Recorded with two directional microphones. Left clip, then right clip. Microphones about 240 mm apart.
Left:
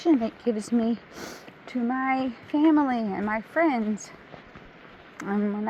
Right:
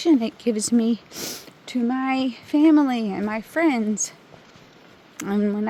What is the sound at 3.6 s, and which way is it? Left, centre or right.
Speech, right.